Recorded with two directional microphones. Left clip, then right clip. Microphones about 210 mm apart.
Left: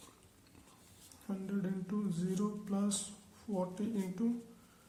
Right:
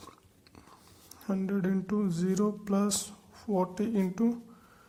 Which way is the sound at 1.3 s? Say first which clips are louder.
Right 9 dB; 35° right (ahead or behind).